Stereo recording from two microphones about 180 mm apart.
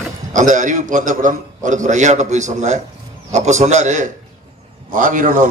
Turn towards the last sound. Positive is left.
turn(degrees=-45)  # may be behind; listen again after turning